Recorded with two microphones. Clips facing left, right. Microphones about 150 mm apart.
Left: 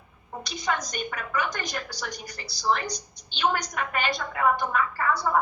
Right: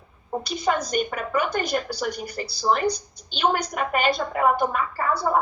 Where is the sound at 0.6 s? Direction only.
45° right (ahead or behind).